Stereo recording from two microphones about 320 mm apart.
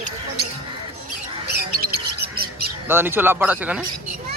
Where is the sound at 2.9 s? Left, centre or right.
Centre.